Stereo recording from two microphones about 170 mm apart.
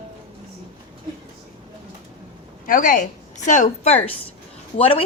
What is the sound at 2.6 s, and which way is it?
A woman's voice, 55° left (ahead or behind).